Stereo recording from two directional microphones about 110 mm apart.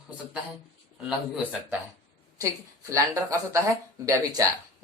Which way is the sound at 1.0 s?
5° right (ahead or behind).